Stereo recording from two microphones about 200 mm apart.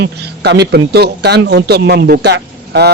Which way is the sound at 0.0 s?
55° right (ahead or behind).